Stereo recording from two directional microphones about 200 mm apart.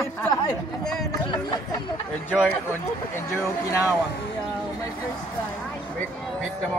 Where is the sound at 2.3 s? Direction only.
10° left (ahead or behind).